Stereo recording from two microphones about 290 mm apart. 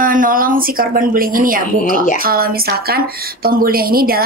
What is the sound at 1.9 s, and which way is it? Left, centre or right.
Speech, left.